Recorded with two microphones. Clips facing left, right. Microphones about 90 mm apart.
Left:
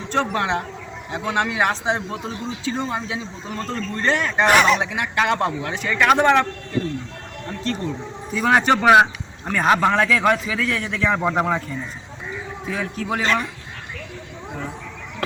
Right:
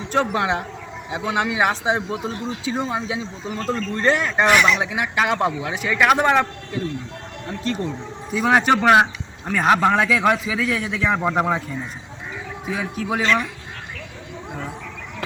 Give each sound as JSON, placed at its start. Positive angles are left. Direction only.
{"t": 0.1, "sound": "a man's voice", "side_deg": -5}
{"t": 4.4, "sound": "speech", "side_deg": 45}
{"t": 4.8, "sound": "a man's voice", "side_deg": -5}
{"t": 7.6, "sound": "a man's voice", "side_deg": -5}
{"t": 12.6, "sound": "a man's voice", "side_deg": -10}
{"t": 13.2, "sound": "speech", "side_deg": 40}